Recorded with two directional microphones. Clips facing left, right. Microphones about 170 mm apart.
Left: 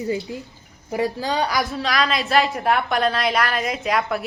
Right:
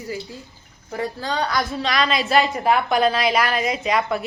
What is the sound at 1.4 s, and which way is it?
A woman's voice, centre (ahead or behind).